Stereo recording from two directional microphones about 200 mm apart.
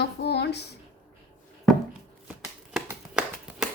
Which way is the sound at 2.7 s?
5° right (ahead or behind).